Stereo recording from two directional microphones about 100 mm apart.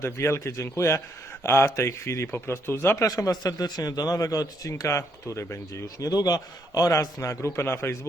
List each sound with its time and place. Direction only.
0.0 s speech: 25° left (ahead or behind)
3.1 s a man's voice: 40° left (ahead or behind)